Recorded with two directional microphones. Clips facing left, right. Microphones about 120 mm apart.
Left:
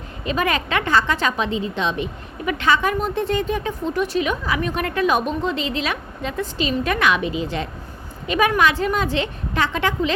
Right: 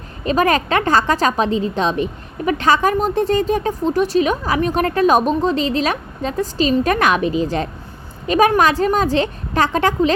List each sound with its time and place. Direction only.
0.3 s a woman's voice: 40° right (ahead or behind)